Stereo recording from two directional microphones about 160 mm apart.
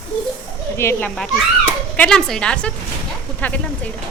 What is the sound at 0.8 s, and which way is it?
A woman's voice, 15° left (ahead or behind).